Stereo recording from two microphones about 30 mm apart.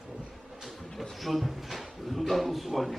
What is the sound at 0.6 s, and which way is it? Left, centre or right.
A man's voice, centre.